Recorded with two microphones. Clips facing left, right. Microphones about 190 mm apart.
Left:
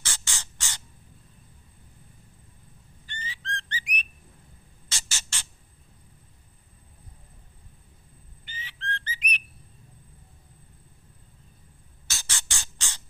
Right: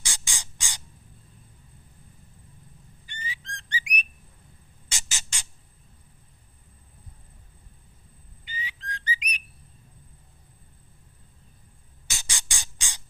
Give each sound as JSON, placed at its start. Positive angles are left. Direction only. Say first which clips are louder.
{"t": 0.0, "sound": "spray", "louder": "even", "side_deg": -15}
{"t": 3.1, "sound": "whistling", "louder": "left 2 dB", "side_deg": -15}
{"t": 4.9, "sound": "a sound", "louder": "even", "side_deg": -15}
{"t": 8.6, "sound": "whistling", "louder": "even", "side_deg": -15}
{"t": 12.1, "sound": "music", "louder": "even", "side_deg": -15}